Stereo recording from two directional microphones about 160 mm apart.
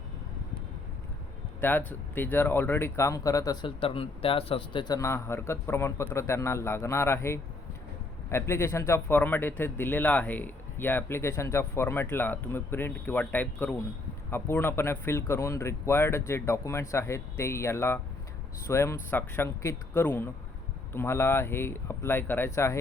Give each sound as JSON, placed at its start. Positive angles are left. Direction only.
{"t": 1.9, "sound": "speech", "side_deg": 10}